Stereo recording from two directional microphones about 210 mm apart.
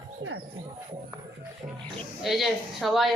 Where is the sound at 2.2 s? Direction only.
Centre (ahead or behind).